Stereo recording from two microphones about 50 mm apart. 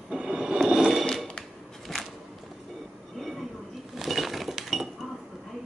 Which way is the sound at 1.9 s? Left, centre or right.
Centre.